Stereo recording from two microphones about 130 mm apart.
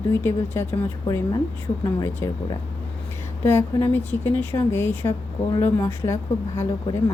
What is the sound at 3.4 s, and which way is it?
A woman's voice, 15° left (ahead or behind).